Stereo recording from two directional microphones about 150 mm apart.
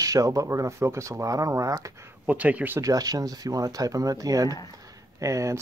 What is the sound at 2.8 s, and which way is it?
Speech, 25° right (ahead or behind).